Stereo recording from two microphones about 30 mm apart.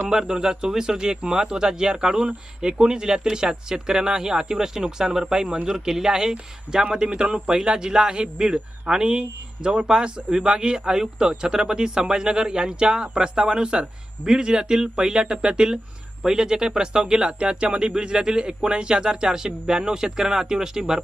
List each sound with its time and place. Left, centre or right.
0.1 s speech: right
6.8 s speech: right; by 21.0 s centre